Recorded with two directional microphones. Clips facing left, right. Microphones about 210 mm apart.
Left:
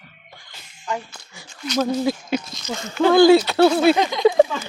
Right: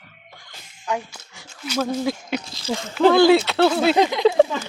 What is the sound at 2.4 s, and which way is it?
Speech, 30° right (ahead or behind).